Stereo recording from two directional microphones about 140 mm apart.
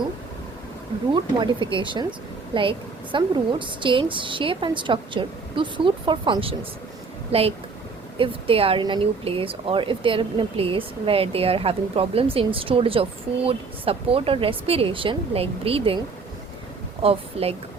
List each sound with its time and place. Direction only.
1.1 s speech: 35° right (ahead or behind)
8.2 s speech: 40° right (ahead or behind)
17.0 s speech: 45° right (ahead or behind)